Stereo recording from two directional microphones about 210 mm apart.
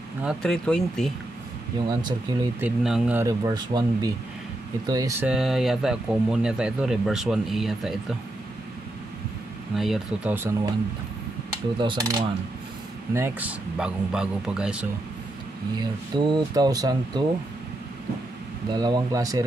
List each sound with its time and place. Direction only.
0.2 s speech: centre (ahead or behind)
1.9 s speech: 20° right (ahead or behind)
2.6 s speech: 5° right (ahead or behind)
5.2 s speech: centre (ahead or behind)
9.8 s speech: centre (ahead or behind)
11.8 s speech: 20° right (ahead or behind); by 14.9 s 5° right (ahead or behind)
15.8 s speech: 20° right (ahead or behind)
18.7 s speech: 20° right (ahead or behind)